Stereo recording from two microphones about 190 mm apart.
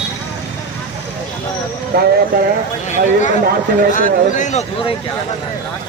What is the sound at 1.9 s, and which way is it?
Speech, 55° right (ahead or behind).